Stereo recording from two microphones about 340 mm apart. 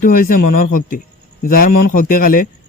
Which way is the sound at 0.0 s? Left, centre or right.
Left.